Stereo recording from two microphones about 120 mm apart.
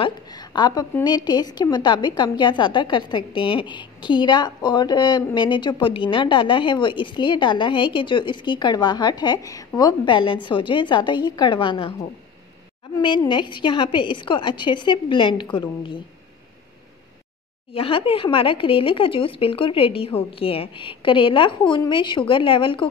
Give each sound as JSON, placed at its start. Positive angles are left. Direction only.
{"t": 0.0, "sound": "a sound", "side_deg": 35}
{"t": 1.0, "sound": "a woman's voice", "side_deg": 35}
{"t": 13.3, "sound": "a woman's voice", "side_deg": 40}
{"t": 17.7, "sound": "speech", "side_deg": 50}